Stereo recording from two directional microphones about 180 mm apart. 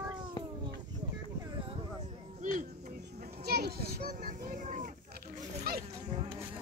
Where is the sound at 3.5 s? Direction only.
60° right (ahead or behind); by 4.9 s 45° right (ahead or behind).